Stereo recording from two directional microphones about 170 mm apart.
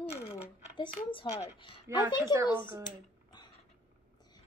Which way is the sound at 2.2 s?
15° right (ahead or behind).